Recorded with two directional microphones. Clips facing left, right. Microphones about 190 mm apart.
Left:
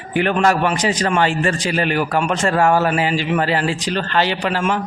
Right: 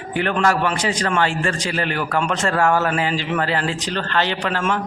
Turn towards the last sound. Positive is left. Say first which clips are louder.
# left 2 dB
turn(degrees=10)  # may be behind; listen again after turning